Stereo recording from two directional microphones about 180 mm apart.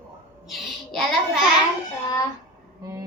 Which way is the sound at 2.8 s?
20° right (ahead or behind).